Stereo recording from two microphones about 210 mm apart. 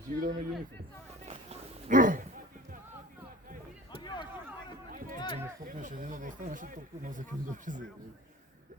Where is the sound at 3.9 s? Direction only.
20° left (ahead or behind).